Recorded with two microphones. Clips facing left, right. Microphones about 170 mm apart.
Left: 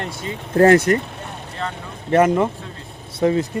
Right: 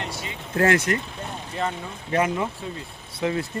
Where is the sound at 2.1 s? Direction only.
50° left (ahead or behind).